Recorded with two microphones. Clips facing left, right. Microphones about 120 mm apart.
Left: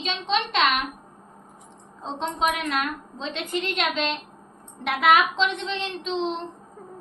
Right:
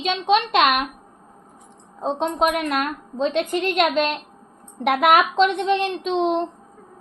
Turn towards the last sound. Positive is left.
turn(degrees=-55)  # may be behind; listen again after turning